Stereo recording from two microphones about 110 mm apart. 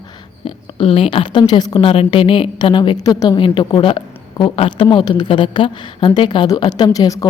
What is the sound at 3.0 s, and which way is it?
Speech, 35° left (ahead or behind).